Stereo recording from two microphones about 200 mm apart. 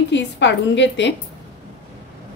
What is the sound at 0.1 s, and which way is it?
A woman's voice, 65° left (ahead or behind).